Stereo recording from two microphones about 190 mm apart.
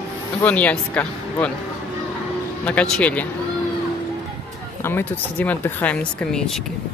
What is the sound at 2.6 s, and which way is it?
Speech, 5° left (ahead or behind).